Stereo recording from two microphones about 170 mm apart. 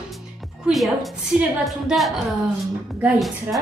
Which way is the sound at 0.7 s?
Centre (ahead or behind).